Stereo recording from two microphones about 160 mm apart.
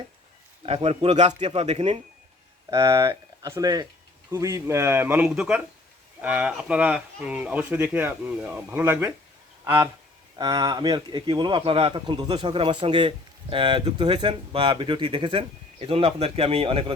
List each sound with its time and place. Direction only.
0.6 s a man's voice: 40° right (ahead or behind)
2.6 s speech: 20° right (ahead or behind)
10.3 s speech: 25° right (ahead or behind)